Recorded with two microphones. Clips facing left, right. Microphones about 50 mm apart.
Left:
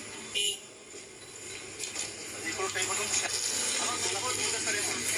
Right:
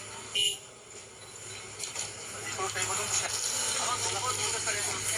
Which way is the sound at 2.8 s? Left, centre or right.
Right.